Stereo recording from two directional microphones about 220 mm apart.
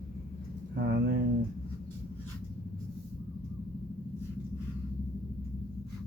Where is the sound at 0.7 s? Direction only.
50° right (ahead or behind).